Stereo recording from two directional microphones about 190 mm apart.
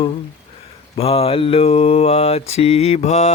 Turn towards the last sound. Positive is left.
turn(degrees=35)  # may be behind; listen again after turning